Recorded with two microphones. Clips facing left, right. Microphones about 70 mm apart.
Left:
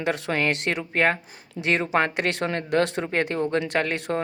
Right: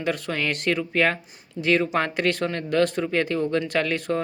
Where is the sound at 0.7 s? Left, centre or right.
Left.